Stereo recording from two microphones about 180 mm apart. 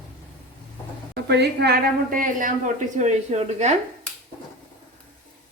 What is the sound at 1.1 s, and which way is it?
A woman's voice, 65° right (ahead or behind).